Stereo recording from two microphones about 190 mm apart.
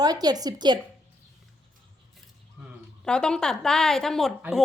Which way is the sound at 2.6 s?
5° right (ahead or behind).